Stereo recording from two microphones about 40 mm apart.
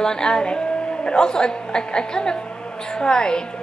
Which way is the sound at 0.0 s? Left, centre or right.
Centre.